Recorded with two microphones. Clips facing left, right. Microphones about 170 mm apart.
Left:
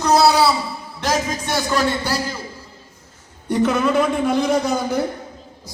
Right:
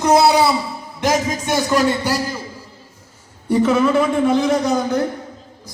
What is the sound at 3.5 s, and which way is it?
A man's voice, 5° right (ahead or behind).